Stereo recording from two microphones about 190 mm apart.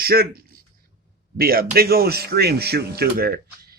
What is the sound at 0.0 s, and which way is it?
Speech, 55° right (ahead or behind).